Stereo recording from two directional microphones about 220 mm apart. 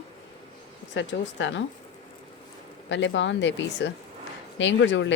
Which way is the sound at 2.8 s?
55° left (ahead or behind).